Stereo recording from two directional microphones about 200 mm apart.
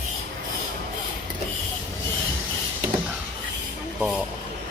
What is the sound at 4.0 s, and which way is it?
Speech, 5° right (ahead or behind).